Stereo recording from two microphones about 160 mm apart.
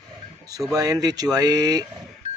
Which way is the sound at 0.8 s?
25° right (ahead or behind).